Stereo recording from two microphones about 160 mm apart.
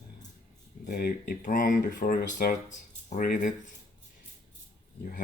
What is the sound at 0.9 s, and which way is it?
Speech, 70° left (ahead or behind).